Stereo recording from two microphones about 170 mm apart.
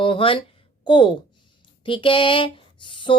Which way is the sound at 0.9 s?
30° left (ahead or behind).